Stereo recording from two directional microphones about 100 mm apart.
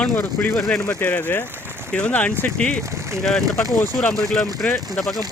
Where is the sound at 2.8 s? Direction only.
30° right (ahead or behind).